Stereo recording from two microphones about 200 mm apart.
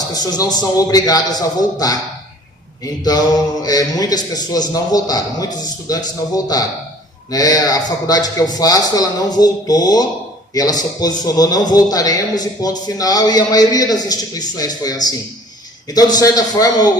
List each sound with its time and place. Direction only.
0.1 s speech: 20° left (ahead or behind)
3.0 s a man's voice: 20° left (ahead or behind)